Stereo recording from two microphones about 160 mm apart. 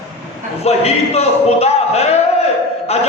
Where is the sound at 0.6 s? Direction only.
40° left (ahead or behind).